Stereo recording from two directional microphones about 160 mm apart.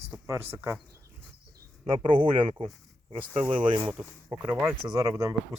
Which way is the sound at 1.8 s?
30° right (ahead or behind).